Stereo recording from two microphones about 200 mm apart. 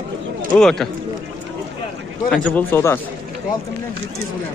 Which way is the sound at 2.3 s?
5° left (ahead or behind).